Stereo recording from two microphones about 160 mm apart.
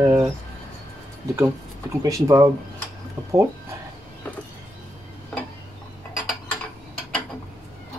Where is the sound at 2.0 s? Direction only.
20° right (ahead or behind).